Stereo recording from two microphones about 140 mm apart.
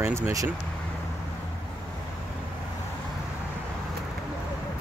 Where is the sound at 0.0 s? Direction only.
20° right (ahead or behind).